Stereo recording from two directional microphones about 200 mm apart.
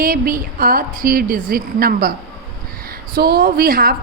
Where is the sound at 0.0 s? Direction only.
45° right (ahead or behind).